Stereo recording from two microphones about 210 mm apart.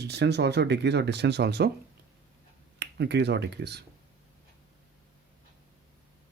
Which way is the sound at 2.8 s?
55° right (ahead or behind).